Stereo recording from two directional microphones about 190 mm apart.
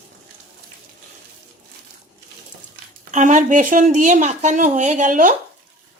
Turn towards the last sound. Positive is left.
turn(degrees=-45)  # may be behind; listen again after turning